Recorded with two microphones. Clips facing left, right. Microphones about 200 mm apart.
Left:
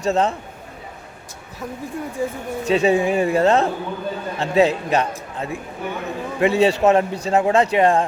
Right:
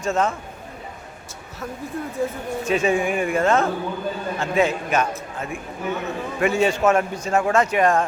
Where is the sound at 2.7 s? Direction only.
35° left (ahead or behind).